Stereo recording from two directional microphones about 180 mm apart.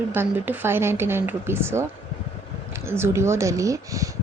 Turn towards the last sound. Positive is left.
turn(degrees=-20)  # may be behind; listen again after turning